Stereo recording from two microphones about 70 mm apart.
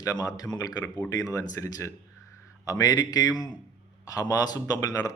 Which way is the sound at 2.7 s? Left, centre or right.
Left.